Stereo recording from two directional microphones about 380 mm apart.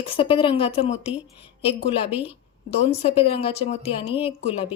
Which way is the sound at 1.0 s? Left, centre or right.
Centre.